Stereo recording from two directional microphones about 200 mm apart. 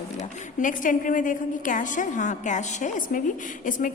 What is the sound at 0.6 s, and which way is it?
A woman's voice, 40° left (ahead or behind).